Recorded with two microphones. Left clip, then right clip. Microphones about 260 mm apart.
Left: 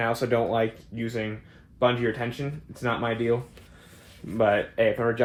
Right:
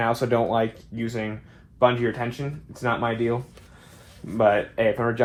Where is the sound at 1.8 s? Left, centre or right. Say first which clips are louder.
Right 3 dB; centre.